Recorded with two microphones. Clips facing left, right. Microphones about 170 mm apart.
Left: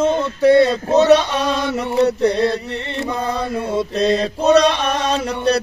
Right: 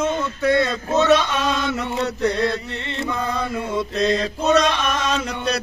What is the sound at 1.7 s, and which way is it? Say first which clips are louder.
Mantra: left 7 dB; 35° left (ahead or behind).